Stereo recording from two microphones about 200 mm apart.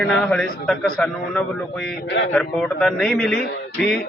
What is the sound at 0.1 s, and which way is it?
Speech, 5° left (ahead or behind).